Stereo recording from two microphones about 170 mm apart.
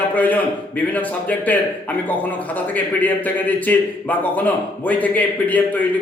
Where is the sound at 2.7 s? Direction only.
10° left (ahead or behind).